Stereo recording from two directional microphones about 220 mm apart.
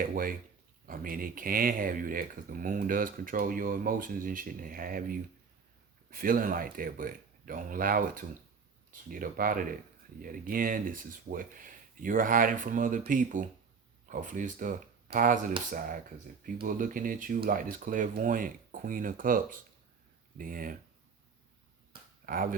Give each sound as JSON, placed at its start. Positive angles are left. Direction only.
{"t": 0.0, "sound": "speech", "side_deg": -40}
{"t": 22.3, "sound": "speech", "side_deg": -40}